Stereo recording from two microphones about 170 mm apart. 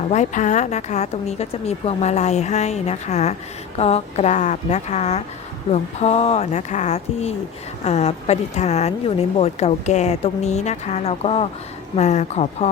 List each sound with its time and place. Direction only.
0.1 s a woman's voice: 45° left (ahead or behind)